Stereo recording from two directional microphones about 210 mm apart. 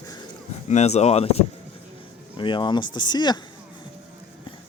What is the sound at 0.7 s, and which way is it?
Speech, 30° left (ahead or behind).